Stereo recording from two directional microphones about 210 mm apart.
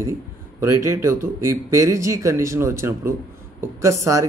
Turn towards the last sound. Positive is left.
turn(degrees=-15)  # may be behind; listen again after turning